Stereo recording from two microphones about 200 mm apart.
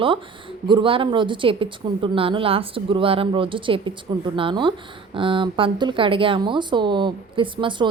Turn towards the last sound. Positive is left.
turn(degrees=-25)  # may be behind; listen again after turning